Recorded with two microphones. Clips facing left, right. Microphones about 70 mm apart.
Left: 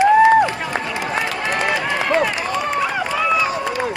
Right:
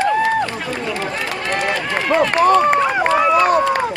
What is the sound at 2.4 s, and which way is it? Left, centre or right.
Run, right.